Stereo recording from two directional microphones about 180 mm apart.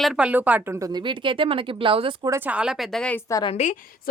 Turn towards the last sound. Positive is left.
turn(degrees=25)  # may be behind; listen again after turning